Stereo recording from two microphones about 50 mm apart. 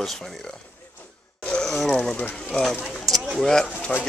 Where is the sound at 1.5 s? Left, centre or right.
Centre.